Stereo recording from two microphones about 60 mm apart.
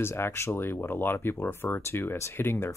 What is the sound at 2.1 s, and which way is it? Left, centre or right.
Speech, left.